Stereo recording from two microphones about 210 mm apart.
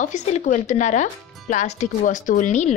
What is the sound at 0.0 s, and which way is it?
Speech, 35° left (ahead or behind).